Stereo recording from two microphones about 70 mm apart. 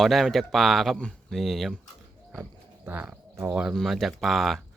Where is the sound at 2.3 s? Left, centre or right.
Centre.